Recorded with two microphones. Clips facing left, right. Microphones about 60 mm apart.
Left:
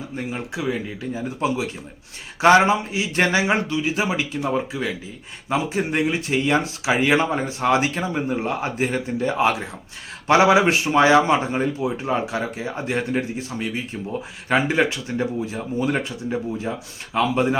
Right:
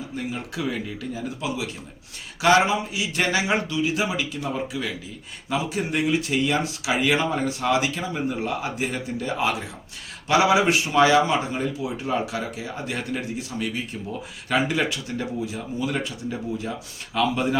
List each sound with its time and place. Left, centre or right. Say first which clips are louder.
0.2 s speech: left 2 dB; left